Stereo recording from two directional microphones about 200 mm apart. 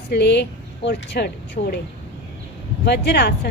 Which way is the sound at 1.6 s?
45° left (ahead or behind).